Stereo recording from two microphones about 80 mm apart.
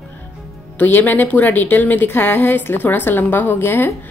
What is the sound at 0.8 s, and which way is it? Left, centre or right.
A woman's voice, left.